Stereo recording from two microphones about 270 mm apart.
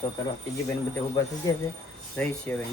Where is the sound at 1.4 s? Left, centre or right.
Centre.